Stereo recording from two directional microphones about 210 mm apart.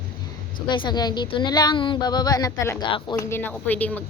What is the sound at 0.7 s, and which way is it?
Speech, 20° left (ahead or behind).